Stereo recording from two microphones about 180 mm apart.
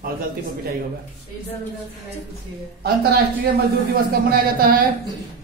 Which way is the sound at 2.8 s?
60° right (ahead or behind).